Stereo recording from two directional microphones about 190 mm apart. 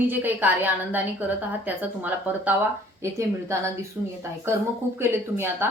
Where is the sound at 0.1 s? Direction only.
10° right (ahead or behind).